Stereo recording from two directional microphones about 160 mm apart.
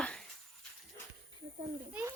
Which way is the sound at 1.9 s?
10° right (ahead or behind).